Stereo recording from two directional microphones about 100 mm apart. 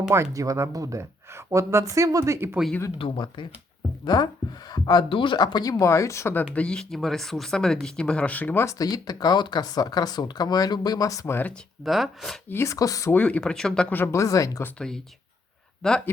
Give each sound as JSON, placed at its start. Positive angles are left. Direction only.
{"t": 0.1, "sound": "speech", "side_deg": -30}
{"t": 3.0, "sound": "speech", "side_deg": 55}
{"t": 5.8, "sound": "speech", "side_deg": 30}
{"t": 6.5, "sound": "speech", "side_deg": 10}
{"t": 8.6, "sound": "speech", "side_deg": 40}
{"t": 11.8, "sound": "speech", "side_deg": 0}
{"t": 12.5, "sound": "speech", "side_deg": 25}
{"t": 13.1, "sound": "speech", "side_deg": 15}
{"t": 13.9, "sound": "speech", "side_deg": 25}
{"t": 14.8, "sound": "speech", "side_deg": 5}